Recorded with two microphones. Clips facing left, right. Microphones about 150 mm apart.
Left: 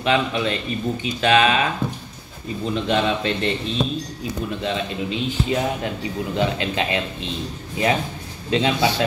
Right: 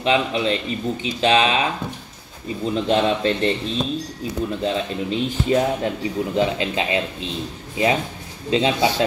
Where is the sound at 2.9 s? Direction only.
35° right (ahead or behind).